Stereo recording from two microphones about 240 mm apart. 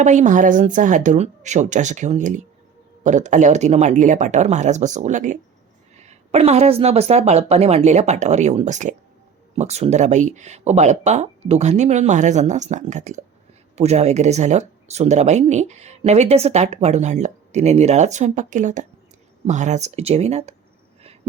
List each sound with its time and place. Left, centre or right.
0.0 s speech: right